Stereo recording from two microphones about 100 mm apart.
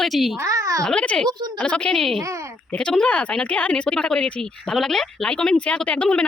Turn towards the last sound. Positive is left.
turn(degrees=15)  # may be behind; listen again after turning